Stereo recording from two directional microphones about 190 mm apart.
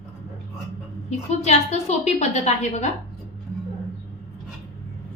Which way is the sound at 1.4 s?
35° left (ahead or behind).